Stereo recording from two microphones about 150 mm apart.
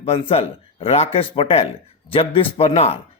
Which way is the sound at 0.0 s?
40° left (ahead or behind).